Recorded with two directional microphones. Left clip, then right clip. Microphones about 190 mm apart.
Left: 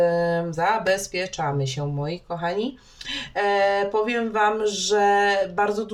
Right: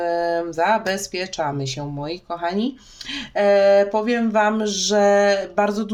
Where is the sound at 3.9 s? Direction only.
40° right (ahead or behind).